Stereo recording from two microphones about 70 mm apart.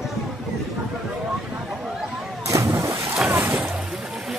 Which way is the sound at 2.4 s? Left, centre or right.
Right.